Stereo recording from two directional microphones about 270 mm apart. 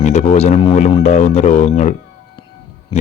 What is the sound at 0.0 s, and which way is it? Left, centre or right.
Speech, left.